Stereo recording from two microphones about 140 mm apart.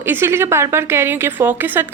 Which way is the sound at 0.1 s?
15° right (ahead or behind).